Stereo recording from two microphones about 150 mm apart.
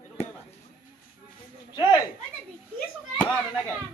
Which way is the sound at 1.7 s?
30° left (ahead or behind).